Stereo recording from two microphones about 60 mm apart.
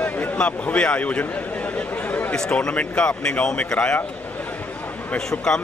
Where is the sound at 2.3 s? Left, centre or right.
Centre.